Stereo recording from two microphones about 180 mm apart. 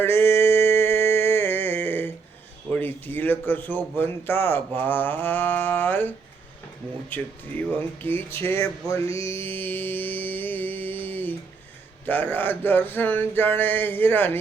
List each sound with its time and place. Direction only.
0.0 s a sound: 10° left (ahead or behind)
2.6 s a man's voice: 10° left (ahead or behind)
9.0 s music: 30° right (ahead or behind)
9.3 s a man's voice: 10° left (ahead or behind)